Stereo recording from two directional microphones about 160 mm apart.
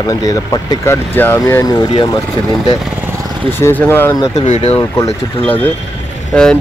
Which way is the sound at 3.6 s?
10° left (ahead or behind).